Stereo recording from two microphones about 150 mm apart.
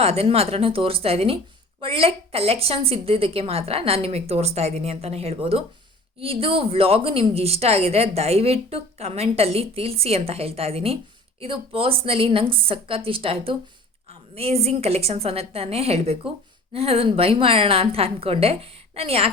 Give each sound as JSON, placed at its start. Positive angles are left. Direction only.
{"t": 0.0, "sound": "a woman's voice", "side_deg": -40}